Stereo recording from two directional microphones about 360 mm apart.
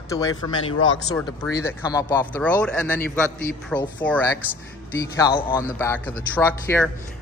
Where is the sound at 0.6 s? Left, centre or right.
Left.